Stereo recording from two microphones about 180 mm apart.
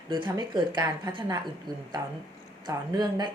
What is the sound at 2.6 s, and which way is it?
Speech, 25° right (ahead or behind).